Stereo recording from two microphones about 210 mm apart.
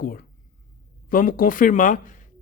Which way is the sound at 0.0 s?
45° left (ahead or behind).